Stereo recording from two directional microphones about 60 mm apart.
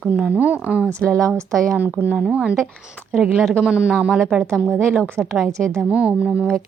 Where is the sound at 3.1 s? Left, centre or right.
Centre.